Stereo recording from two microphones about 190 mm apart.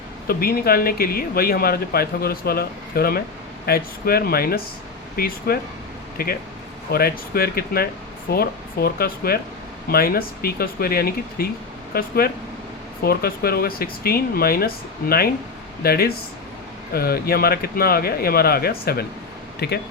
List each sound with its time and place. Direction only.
0.3 s speech: 50° left (ahead or behind)